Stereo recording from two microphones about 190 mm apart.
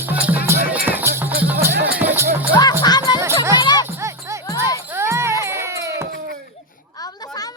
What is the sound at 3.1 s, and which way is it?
Music, 20° left (ahead or behind).